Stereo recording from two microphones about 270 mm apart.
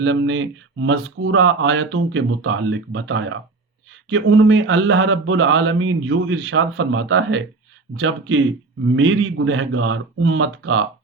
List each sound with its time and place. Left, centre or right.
0.0 s speech: right